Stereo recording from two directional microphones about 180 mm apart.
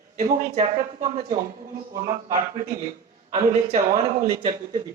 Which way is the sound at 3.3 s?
40° right (ahead or behind).